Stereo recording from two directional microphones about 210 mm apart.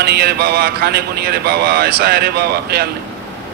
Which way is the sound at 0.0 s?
50° right (ahead or behind).